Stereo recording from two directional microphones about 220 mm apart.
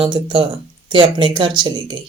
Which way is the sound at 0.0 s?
20° right (ahead or behind).